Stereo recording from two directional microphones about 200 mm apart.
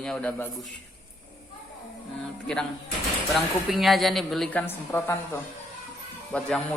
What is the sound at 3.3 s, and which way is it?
A woman's voice, centre (ahead or behind).